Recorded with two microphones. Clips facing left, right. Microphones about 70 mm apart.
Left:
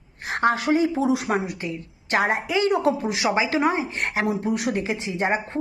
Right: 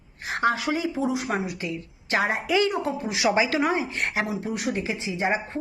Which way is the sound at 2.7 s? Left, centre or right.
Left.